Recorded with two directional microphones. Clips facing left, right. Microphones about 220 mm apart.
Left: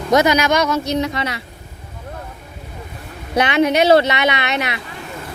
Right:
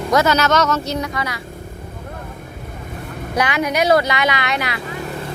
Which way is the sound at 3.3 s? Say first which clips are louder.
Left 4 dB; 25° left (ahead or behind).